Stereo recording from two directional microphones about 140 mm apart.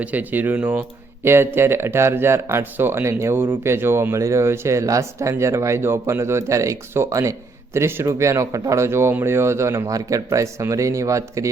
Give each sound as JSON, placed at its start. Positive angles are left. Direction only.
{"t": 0.0, "sound": "speech", "side_deg": -10}